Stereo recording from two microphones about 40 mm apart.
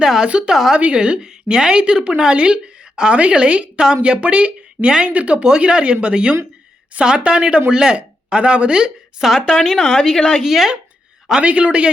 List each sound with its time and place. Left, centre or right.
0.0 s a sound: centre
0.3 s a woman's voice: right
9.2 s a woman's voice: centre
9.6 s speech: centre
10.2 s a woman's voice: centre
10.4 s a woman's voice: centre
11.3 s speech: right